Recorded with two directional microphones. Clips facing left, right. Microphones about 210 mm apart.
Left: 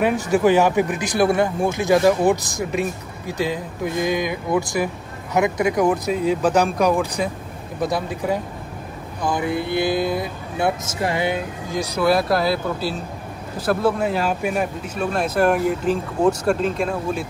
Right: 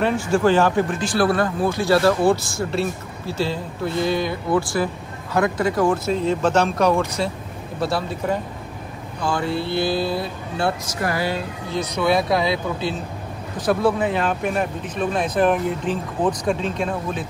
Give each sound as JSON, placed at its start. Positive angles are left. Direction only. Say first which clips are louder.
{"t": 0.0, "sound": "speech", "louder": "left 1 dB", "side_deg": 15}